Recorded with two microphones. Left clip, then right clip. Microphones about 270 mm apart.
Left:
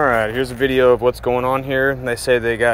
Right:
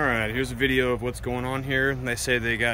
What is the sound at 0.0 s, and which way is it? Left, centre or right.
Speech, centre.